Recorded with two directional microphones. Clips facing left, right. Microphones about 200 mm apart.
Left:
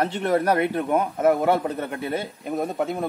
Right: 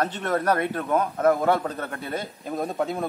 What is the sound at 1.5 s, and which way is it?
Speech, 20° left (ahead or behind).